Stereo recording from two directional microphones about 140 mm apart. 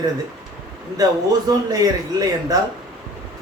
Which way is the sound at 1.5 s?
25° right (ahead or behind).